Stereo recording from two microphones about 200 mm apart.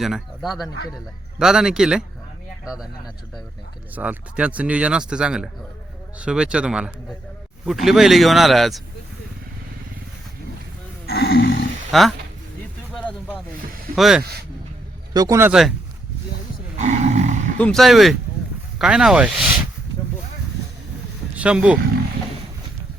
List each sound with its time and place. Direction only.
0.0 s speech: centre (ahead or behind)
3.9 s speech: 5° right (ahead or behind)
11.0 s a sound: 50° left (ahead or behind)
11.9 s speech: centre (ahead or behind)
12.9 s a sound: 5° left (ahead or behind)
13.9 s speech: centre (ahead or behind)
15.1 s a man's voice: 20° right (ahead or behind)
16.7 s roaring cats: 35° right (ahead or behind)
17.6 s speech: centre (ahead or behind)
21.3 s speech: 5° right (ahead or behind)